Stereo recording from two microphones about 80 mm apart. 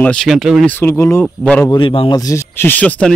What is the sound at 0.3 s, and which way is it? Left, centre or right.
Speech, centre.